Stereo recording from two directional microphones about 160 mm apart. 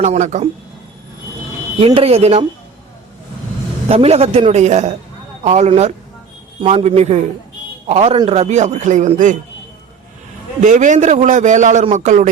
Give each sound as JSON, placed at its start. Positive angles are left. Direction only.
{"t": 0.0, "sound": "a man's voice", "side_deg": -45}
{"t": 1.8, "sound": "a man's voice", "side_deg": -35}
{"t": 3.8, "sound": "a man's voice", "side_deg": -40}
{"t": 10.6, "sound": "a man's voice", "side_deg": -50}